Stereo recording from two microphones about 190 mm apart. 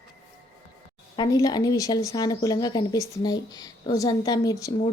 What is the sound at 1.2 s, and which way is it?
A woman's voice, 20° left (ahead or behind).